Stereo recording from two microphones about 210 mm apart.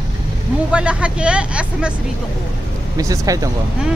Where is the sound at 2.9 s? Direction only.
15° right (ahead or behind).